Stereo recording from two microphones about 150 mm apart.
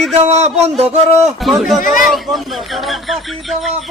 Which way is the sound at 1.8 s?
65° left (ahead or behind).